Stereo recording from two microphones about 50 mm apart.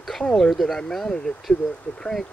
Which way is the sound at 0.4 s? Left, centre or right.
Centre.